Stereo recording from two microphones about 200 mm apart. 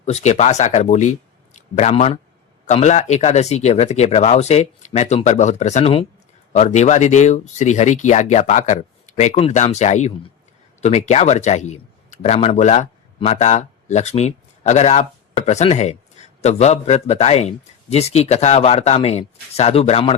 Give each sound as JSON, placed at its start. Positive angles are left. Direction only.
{"t": 0.0, "sound": "speech", "side_deg": 35}